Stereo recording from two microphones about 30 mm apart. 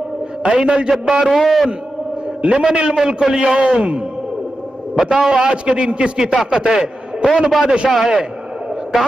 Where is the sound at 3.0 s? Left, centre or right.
Right.